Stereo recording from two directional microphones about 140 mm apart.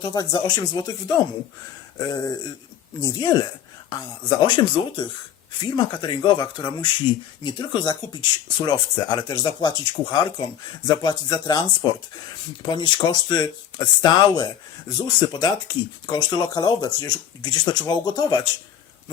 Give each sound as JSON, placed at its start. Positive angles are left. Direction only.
{"t": 0.0, "sound": "speech", "side_deg": 30}